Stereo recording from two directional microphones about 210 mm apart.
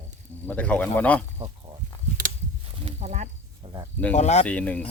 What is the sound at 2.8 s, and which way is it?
Snake, 35° right (ahead or behind).